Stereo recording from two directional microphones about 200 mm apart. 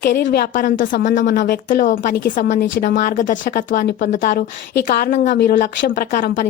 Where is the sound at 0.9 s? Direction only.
60° left (ahead or behind).